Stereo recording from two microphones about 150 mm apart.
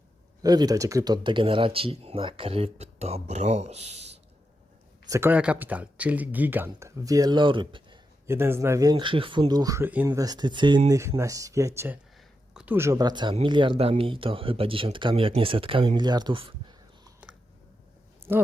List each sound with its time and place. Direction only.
0.4 s speech: 25° right (ahead or behind); by 4.2 s 45° right (ahead or behind)
5.0 s speech: 20° right (ahead or behind)
5.3 s speech: 10° right (ahead or behind); by 7.9 s 35° right (ahead or behind)
8.3 s speech: 15° right (ahead or behind)
10.1 s speech: 25° right (ahead or behind)